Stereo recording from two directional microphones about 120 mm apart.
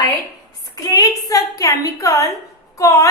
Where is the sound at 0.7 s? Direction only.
30° left (ahead or behind).